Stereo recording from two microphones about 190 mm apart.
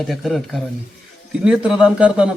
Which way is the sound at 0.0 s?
Centre (ahead or behind).